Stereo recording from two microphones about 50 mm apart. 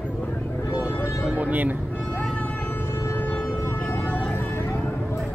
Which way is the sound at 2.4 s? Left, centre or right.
Left.